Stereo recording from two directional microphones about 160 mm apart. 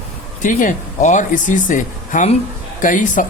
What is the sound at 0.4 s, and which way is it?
Speech, 50° left (ahead or behind).